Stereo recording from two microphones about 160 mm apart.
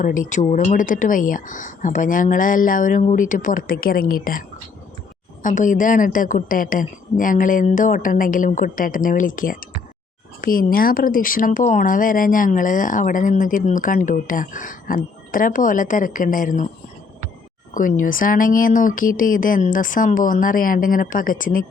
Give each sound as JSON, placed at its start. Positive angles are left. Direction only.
{"t": 0.0, "sound": "speech", "side_deg": 55}
{"t": 17.7, "sound": "speech", "side_deg": 55}